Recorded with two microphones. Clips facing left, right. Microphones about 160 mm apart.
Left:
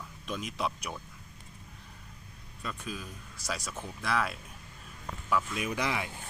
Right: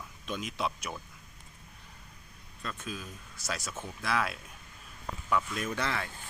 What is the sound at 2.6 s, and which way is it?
Speech, centre (ahead or behind).